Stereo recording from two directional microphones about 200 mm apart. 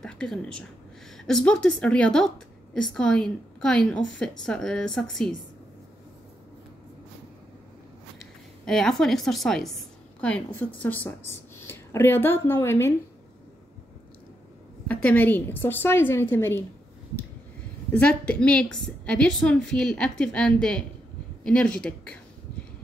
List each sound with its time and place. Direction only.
0.0 s a woman's voice: 5° left (ahead or behind)
8.6 s a woman's voice: centre (ahead or behind)
14.9 s a woman's voice: 10° left (ahead or behind)
17.9 s a woman's voice: 5° left (ahead or behind)